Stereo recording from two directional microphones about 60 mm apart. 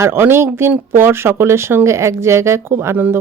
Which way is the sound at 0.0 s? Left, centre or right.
Right.